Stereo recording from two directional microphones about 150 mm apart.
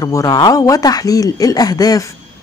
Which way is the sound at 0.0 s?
25° left (ahead or behind).